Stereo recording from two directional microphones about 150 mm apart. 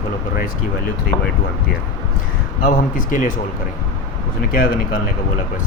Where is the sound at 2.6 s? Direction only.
60° left (ahead or behind).